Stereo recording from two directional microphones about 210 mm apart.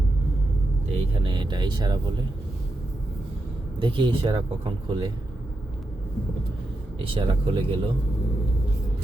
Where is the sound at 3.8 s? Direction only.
25° right (ahead or behind).